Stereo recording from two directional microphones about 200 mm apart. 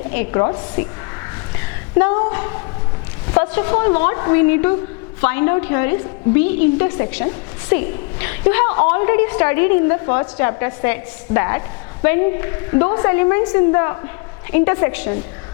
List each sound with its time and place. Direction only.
0.1 s a woman's voice: 15° left (ahead or behind)
1.5 s a sound: 15° left (ahead or behind)
2.3 s a woman's voice: 20° left (ahead or behind)